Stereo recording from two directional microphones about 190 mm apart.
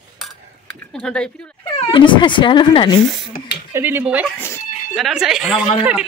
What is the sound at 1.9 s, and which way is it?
Speech, 25° left (ahead or behind).